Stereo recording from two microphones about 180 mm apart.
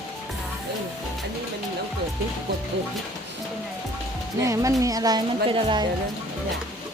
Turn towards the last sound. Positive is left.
turn(degrees=-25)  # may be behind; listen again after turning